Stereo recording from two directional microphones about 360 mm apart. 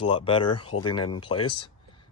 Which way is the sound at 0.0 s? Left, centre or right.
Centre.